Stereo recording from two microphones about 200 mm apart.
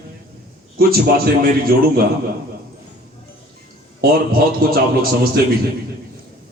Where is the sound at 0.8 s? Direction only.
50° right (ahead or behind).